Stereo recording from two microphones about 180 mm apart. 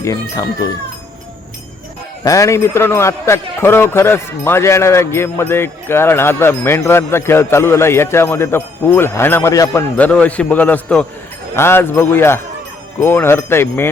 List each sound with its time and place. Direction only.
0.0 s speech: 20° left (ahead or behind)
2.2 s speech: 20° left (ahead or behind)